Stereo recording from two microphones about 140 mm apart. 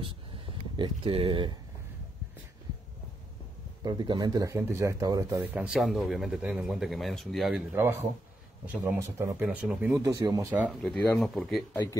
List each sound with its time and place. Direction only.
0.0 s a sound: 35° right (ahead or behind)
3.8 s speech: 30° right (ahead or behind)
5.4 s speech: 10° right (ahead or behind)
7.7 s speech: 15° right (ahead or behind)
9.4 s speech: 10° right (ahead or behind)
10.0 s speech: 25° right (ahead or behind)
10.5 s speech: 10° right (ahead or behind)
10.8 s speech: 5° left (ahead or behind)